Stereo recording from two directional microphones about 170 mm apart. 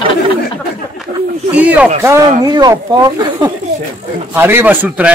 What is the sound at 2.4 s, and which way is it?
Speech, 25° right (ahead or behind).